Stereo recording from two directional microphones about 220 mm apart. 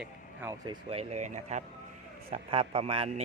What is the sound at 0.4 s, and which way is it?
A man's voice, 20° right (ahead or behind).